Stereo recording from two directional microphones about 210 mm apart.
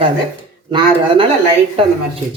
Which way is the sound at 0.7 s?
25° right (ahead or behind).